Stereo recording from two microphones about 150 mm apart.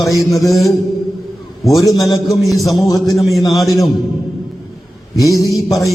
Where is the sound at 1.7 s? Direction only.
25° left (ahead or behind).